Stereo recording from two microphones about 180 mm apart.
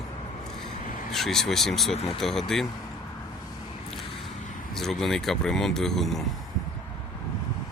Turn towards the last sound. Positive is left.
turn(degrees=0)  # may be behind; listen again after turning